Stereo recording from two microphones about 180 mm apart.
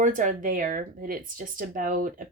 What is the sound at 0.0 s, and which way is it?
Speech, 45° right (ahead or behind).